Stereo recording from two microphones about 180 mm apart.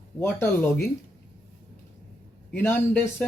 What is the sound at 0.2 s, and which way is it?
Speech, 15° left (ahead or behind).